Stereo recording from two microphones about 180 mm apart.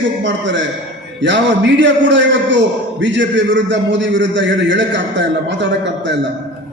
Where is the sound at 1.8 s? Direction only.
90° right.